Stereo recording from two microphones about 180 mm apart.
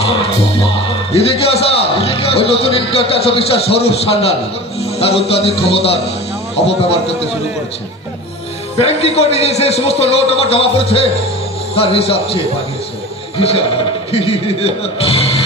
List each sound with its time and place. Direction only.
1.1 s a man's voice: 35° left (ahead or behind)
8.7 s a man's voice: 35° left (ahead or behind)
13.4 s a man's voice: 35° left (ahead or behind)
15.1 s music: 35° left (ahead or behind)